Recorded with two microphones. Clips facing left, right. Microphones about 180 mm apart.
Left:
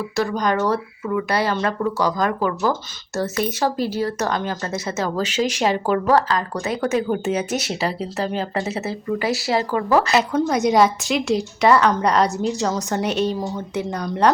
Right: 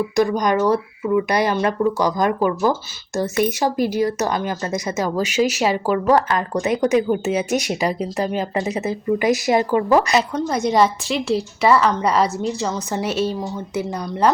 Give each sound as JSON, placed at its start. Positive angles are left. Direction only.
{"t": 0.2, "sound": "speech", "side_deg": -15}
{"t": 6.1, "sound": "speech", "side_deg": -20}
{"t": 10.3, "sound": "a woman's voice", "side_deg": 0}